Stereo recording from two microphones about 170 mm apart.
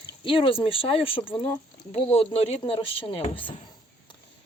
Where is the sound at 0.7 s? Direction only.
30° left (ahead or behind).